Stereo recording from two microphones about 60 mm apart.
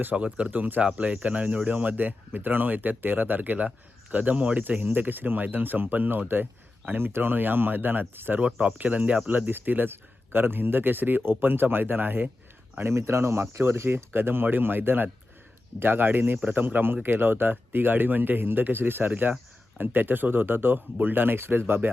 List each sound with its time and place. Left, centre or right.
0.0 s speech: right
8.4 s speech: centre
12.8 s speech: right